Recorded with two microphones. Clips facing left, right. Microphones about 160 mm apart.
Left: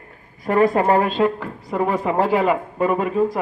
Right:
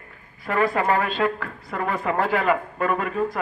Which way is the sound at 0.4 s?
40° left (ahead or behind).